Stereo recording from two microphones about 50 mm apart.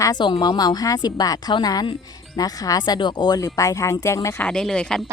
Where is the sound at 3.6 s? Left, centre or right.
Left.